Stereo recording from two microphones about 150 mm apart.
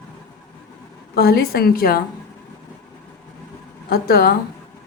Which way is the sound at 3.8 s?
90° left.